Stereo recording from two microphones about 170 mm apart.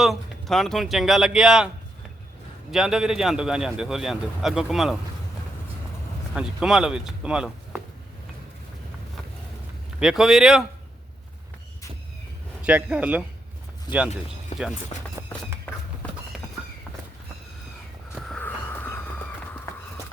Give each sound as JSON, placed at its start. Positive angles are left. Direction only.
{"t": 0.0, "sound": "a man's voice", "side_deg": 0}
{"t": 2.7, "sound": "a man's voice", "side_deg": -5}
{"t": 6.3, "sound": "a man's voice", "side_deg": -5}
{"t": 10.0, "sound": "a man's voice", "side_deg": -5}
{"t": 12.6, "sound": "speech", "side_deg": -5}
{"t": 13.9, "sound": "speech", "side_deg": 25}
{"t": 18.1, "sound": "vehicle", "side_deg": 5}